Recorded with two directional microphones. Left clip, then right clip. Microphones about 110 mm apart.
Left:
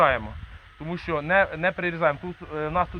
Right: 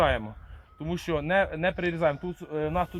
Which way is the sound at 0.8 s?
45° right (ahead or behind).